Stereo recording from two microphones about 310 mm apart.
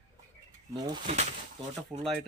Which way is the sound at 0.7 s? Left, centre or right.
Centre.